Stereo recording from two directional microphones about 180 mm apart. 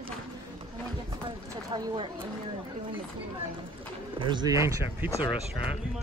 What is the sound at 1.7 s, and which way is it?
Speech, 25° right (ahead or behind).